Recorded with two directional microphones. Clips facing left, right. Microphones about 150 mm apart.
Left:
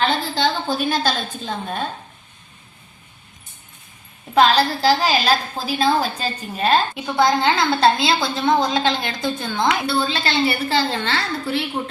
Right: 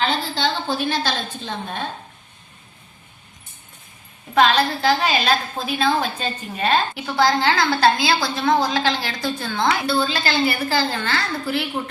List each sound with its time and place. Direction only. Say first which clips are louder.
0.3 s a woman's voice: left 2 dB; 45° left (ahead or behind)
4.4 s a woman's voice: left 2 dB; 35° left (ahead or behind)
7.2 s a woman's voice: left 1 dB; 20° left (ahead or behind)